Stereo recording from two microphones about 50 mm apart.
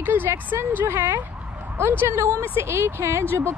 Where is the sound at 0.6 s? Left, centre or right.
Right.